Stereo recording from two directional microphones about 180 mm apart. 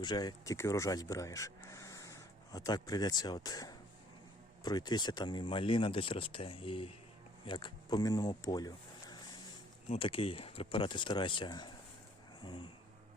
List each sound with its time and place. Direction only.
0.0 s speech: 25° left (ahead or behind)